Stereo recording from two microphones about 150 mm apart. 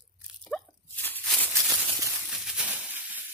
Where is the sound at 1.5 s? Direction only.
15° right (ahead or behind).